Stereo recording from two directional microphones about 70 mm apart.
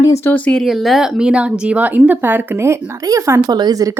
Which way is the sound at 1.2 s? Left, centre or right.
Centre.